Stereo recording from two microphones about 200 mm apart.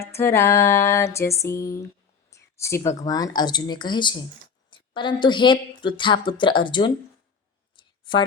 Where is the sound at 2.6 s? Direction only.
15° left (ahead or behind).